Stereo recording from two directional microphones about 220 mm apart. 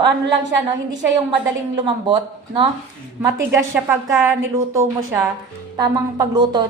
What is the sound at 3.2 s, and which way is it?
A woman's voice, 15° right (ahead or behind).